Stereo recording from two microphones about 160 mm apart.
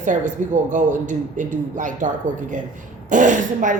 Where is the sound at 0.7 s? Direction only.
50° right (ahead or behind).